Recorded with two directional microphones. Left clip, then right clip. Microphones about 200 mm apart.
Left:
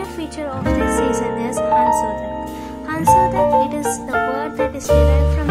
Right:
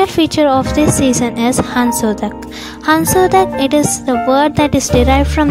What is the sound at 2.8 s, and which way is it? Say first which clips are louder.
Speech: right 3 dB; 40° right (ahead or behind).